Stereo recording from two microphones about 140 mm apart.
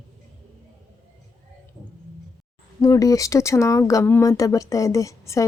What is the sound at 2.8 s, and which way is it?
Speech, 25° left (ahead or behind).